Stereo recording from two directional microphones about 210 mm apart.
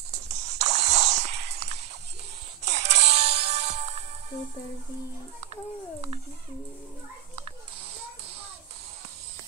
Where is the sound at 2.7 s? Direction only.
35° right (ahead or behind).